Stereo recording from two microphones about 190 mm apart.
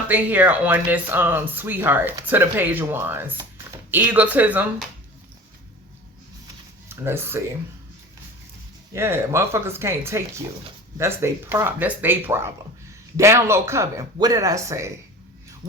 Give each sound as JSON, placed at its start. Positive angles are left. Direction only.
{"t": 0.1, "sound": "speech", "side_deg": -10}
{"t": 6.8, "sound": "speech", "side_deg": -15}
{"t": 8.9, "sound": "speech", "side_deg": -15}